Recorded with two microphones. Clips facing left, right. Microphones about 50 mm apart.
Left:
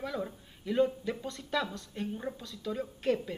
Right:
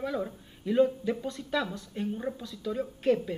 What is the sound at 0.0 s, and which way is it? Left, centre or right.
A woman's voice, centre.